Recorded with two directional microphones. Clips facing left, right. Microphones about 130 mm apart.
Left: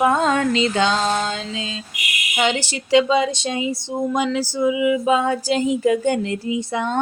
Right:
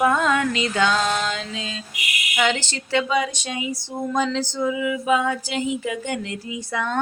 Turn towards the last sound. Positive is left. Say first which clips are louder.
# left 4 dB
turn(degrees=25)  # may be behind; listen again after turning